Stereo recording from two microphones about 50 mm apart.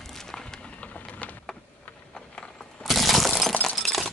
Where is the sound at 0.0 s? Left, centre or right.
Centre.